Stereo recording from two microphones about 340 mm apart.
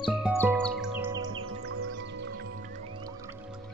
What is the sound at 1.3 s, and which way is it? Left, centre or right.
Music, right.